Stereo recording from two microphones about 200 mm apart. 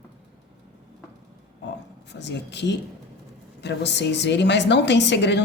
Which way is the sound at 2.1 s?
60° left (ahead or behind).